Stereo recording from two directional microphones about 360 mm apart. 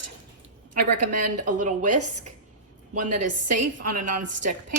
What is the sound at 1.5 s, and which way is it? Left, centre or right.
Speech, right.